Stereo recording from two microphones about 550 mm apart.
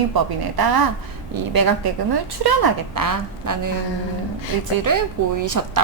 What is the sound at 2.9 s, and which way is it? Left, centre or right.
Speech, right.